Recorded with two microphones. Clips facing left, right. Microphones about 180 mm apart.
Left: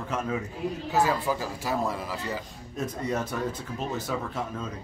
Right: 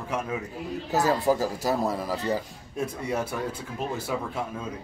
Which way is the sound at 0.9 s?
40° right (ahead or behind).